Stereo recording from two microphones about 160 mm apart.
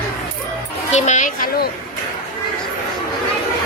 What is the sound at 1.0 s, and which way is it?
Speech, 50° left (ahead or behind).